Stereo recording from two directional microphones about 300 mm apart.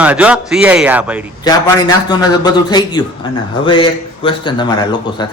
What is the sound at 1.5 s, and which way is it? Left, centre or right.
Speech, centre.